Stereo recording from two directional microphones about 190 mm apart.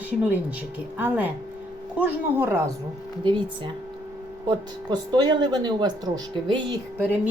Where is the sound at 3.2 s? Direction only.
25° right (ahead or behind).